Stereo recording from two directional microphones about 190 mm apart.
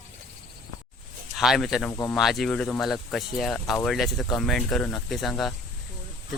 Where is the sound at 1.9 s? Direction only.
20° left (ahead or behind).